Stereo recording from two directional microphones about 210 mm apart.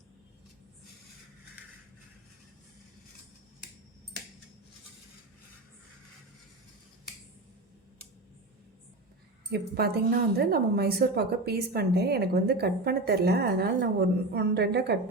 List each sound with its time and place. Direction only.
9.5 s a woman's voice: 50° right (ahead or behind)